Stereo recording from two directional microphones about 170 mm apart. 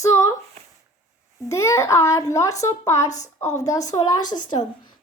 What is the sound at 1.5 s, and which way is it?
A child's voice, 15° left (ahead or behind).